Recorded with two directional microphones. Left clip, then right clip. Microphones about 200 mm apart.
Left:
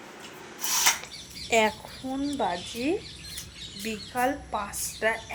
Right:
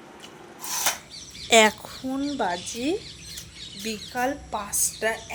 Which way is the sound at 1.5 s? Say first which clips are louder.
Right 6 dB; 45° right (ahead or behind).